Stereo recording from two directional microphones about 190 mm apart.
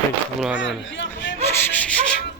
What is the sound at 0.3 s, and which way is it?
Speech, centre (ahead or behind).